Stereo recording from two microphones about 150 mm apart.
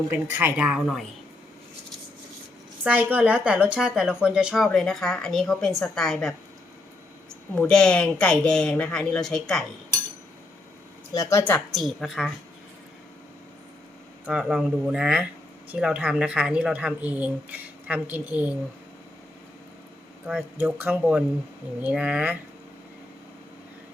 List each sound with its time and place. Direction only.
0.1 s speech: 15° right (ahead or behind)
2.8 s a woman's voice: 10° right (ahead or behind)
7.5 s a woman's voice: 5° left (ahead or behind)
11.1 s speech: 20° left (ahead or behind)
11.7 s a woman's voice: centre (ahead or behind)
14.3 s a woman's voice: 5° right (ahead or behind)
20.2 s speech: 10° right (ahead or behind)